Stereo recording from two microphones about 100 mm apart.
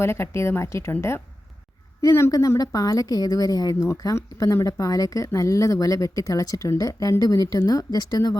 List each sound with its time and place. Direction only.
0.0 s a woman's voice: 25° left (ahead or behind)
2.0 s a woman's voice: 30° left (ahead or behind)